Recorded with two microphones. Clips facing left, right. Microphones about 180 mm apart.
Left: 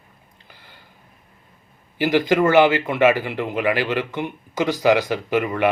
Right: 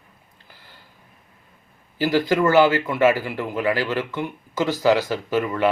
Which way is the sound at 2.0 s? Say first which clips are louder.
Left 2 dB; 20° left (ahead or behind).